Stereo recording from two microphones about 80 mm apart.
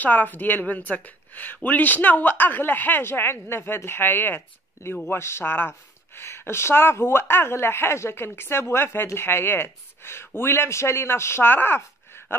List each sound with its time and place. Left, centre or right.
0.0 s speech: left